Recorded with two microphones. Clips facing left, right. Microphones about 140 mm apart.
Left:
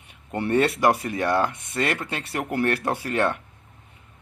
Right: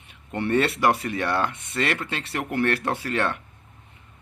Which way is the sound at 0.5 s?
15° left (ahead or behind).